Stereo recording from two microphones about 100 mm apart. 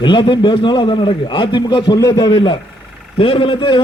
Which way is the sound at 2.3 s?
60° left (ahead or behind).